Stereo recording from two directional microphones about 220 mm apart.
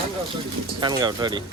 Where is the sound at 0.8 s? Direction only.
20° right (ahead or behind).